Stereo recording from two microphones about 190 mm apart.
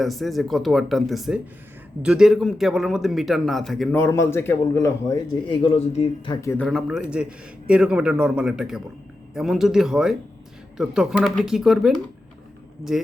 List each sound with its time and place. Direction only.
0.0 s a man's voice: centre (ahead or behind)
3.9 s a man's voice: 15° left (ahead or behind)
5.6 s speech: 35° left (ahead or behind)
6.3 s a man's voice: 15° left (ahead or behind)
6.7 s a man's voice: centre (ahead or behind)
12.9 s a man's voice: centre (ahead or behind)